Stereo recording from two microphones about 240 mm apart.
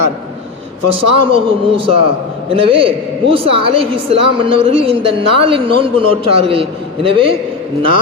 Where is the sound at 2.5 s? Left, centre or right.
Right.